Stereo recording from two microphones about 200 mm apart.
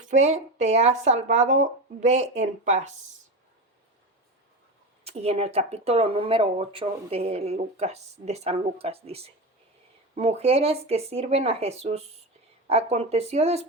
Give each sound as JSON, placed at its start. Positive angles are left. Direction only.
{"t": 0.0, "sound": "speech", "side_deg": -35}
{"t": 5.0, "sound": "speech", "side_deg": -30}